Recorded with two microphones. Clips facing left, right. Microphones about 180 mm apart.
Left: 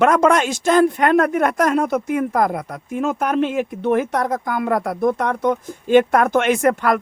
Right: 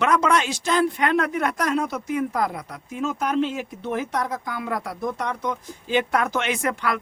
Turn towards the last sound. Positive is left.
turn(degrees=50)  # may be behind; listen again after turning